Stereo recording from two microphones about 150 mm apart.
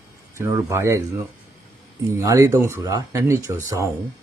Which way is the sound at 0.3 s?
20° right (ahead or behind).